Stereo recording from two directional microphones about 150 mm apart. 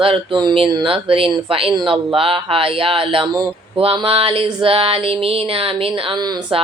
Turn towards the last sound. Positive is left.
turn(degrees=-35)  # may be behind; listen again after turning